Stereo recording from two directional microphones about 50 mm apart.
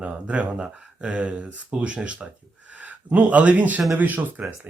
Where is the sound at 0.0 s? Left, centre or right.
Right.